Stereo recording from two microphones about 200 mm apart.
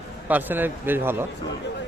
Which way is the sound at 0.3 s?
10° right (ahead or behind).